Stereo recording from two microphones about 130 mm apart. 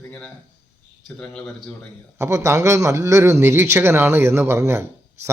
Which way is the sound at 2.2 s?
25° right (ahead or behind).